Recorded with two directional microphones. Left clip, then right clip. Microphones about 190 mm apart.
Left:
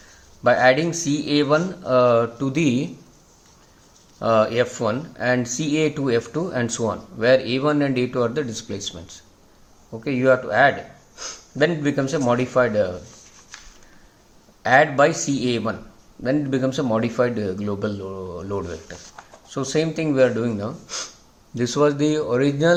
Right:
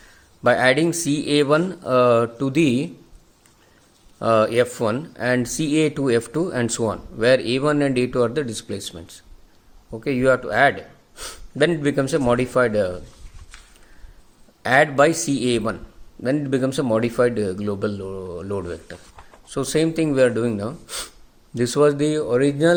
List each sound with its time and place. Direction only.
0.4 s speech: 45° right (ahead or behind)
4.2 s speech: 45° right (ahead or behind)
14.6 s speech: 45° right (ahead or behind)